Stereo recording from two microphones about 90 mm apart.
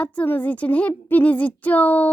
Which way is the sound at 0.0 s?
15° left (ahead or behind).